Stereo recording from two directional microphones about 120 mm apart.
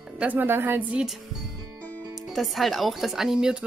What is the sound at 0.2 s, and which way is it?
Speech, 15° right (ahead or behind).